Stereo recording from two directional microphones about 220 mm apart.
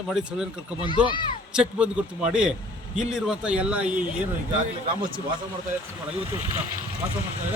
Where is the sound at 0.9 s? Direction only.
20° left (ahead or behind).